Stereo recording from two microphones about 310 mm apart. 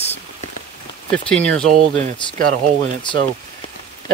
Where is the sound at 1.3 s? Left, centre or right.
Centre.